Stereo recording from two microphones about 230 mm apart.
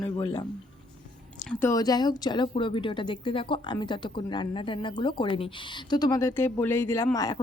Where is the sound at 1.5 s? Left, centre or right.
Centre.